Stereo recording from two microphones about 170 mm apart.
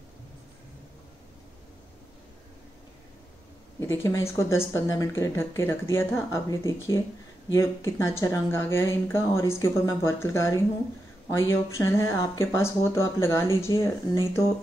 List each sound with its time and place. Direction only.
3.8 s speech: 15° left (ahead or behind)